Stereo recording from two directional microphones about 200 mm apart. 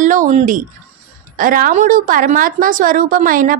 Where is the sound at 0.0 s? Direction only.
40° right (ahead or behind).